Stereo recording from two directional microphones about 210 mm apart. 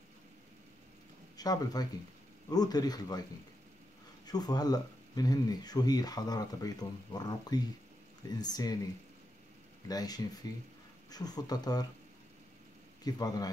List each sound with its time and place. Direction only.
1.3 s speech: 20° left (ahead or behind)
4.3 s speech: 20° left (ahead or behind)
9.8 s a man's voice: 20° left (ahead or behind)
13.0 s a man's voice: 20° left (ahead or behind)